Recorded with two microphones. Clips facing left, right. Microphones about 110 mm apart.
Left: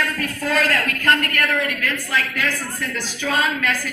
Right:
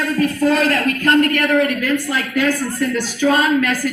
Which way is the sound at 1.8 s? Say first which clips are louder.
Right 5 dB; 10° right (ahead or behind).